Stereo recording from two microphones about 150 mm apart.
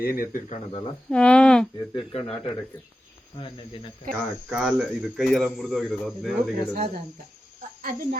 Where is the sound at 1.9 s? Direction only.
40° left (ahead or behind).